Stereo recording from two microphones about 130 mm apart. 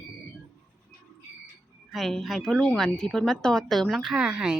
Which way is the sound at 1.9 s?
Centre (ahead or behind).